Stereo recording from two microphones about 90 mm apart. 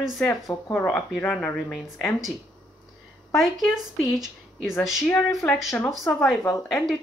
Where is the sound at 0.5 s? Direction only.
25° left (ahead or behind).